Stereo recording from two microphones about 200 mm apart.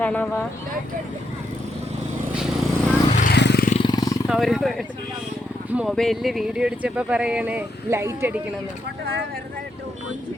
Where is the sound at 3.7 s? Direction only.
25° left (ahead or behind).